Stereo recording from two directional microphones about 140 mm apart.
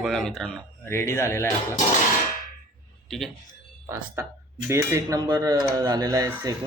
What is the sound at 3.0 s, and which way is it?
Speech, centre (ahead or behind).